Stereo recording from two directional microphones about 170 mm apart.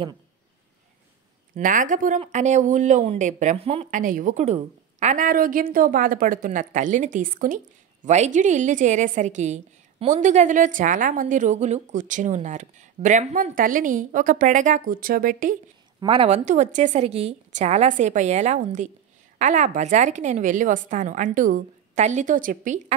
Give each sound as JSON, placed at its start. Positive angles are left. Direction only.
{"t": 1.5, "sound": "a woman's voice", "side_deg": -50}
{"t": 3.9, "sound": "a woman's voice", "side_deg": -50}
{"t": 16.0, "sound": "a woman's voice", "side_deg": -30}
{"t": 16.4, "sound": "a woman's voice", "side_deg": -45}